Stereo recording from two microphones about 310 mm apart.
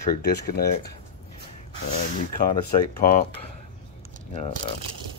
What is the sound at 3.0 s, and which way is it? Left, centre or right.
Speech, left.